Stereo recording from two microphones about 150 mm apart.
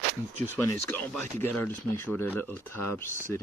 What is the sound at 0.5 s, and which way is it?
Speech, 15° left (ahead or behind).